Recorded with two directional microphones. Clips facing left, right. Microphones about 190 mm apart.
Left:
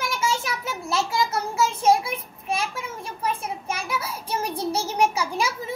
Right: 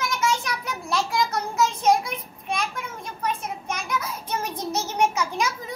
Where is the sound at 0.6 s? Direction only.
Centre (ahead or behind).